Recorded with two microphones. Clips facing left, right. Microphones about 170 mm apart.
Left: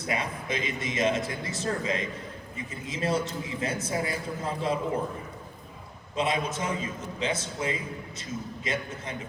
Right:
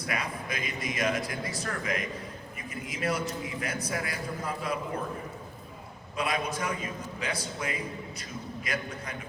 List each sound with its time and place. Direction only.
0.0 s a man's voice: 25° left (ahead or behind)
6.1 s a man's voice: 25° left (ahead or behind)